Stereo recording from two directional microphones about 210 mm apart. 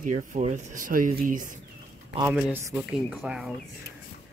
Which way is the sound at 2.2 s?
10° right (ahead or behind).